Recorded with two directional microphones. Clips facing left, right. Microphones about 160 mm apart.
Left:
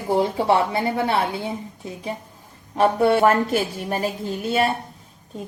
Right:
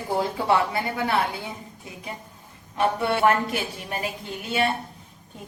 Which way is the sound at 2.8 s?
40° left (ahead or behind).